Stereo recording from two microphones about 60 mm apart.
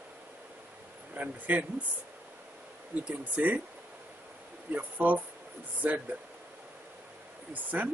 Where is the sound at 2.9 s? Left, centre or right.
Right.